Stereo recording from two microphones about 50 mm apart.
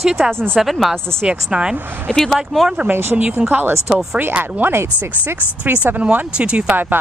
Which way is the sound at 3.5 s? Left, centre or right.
Right.